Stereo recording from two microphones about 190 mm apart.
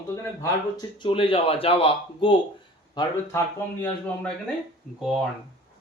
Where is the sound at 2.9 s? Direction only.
15° left (ahead or behind).